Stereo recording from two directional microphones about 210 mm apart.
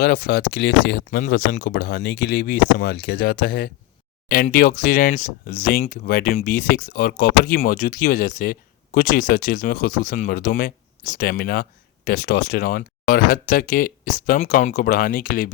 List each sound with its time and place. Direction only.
0.0 s speech: 45° left (ahead or behind)